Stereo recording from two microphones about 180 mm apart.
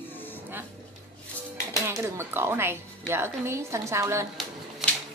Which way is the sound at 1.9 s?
15° right (ahead or behind).